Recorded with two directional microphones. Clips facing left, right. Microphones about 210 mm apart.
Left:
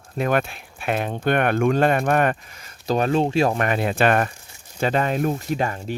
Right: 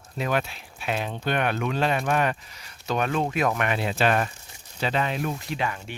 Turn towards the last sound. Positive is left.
turn(degrees=40)  # may be behind; listen again after turning